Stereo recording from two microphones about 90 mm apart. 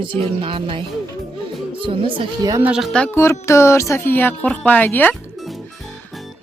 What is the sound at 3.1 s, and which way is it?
Speech, 30° left (ahead or behind).